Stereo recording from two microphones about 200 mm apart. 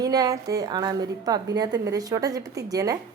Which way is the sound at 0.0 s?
20° right (ahead or behind).